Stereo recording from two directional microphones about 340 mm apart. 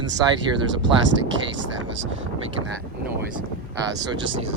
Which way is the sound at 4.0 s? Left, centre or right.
Right.